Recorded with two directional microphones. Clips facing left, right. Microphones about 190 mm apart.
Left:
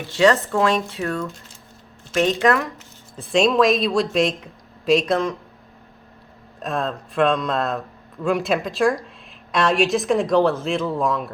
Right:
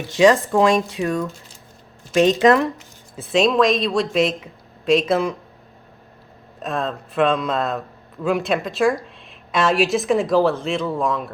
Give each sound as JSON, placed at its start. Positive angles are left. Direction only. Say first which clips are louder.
{"t": 0.1, "sound": "speech", "louder": "right 3 dB", "side_deg": -15}
{"t": 3.2, "sound": "speech", "louder": "even", "side_deg": 0}
{"t": 6.6, "sound": "speech", "louder": "even", "side_deg": 0}